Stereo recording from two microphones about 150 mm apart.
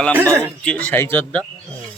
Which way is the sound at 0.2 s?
15° right (ahead or behind).